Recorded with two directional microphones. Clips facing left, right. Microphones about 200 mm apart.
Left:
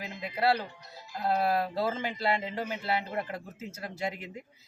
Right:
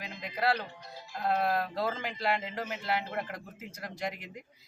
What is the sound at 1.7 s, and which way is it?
Speech, 5° left (ahead or behind).